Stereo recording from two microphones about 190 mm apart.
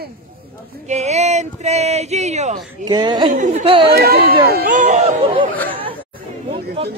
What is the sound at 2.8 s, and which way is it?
Speech, 20° right (ahead or behind).